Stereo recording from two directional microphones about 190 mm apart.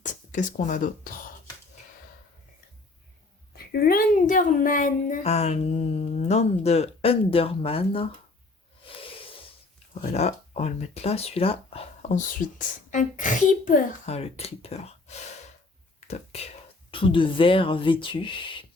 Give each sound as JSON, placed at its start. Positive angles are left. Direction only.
{"t": 0.0, "sound": "speech", "side_deg": 40}
{"t": 3.7, "sound": "speech", "side_deg": 50}
{"t": 8.8, "sound": "a sound", "side_deg": 30}
{"t": 9.9, "sound": "speech", "side_deg": 35}
{"t": 16.0, "sound": "whispering", "side_deg": 35}
{"t": 16.9, "sound": "speech", "side_deg": 25}